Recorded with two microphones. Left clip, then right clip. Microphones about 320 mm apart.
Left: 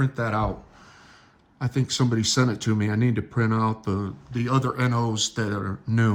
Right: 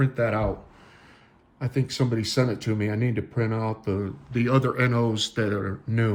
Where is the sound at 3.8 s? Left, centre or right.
Centre.